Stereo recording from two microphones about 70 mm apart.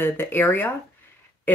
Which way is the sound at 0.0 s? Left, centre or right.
Left.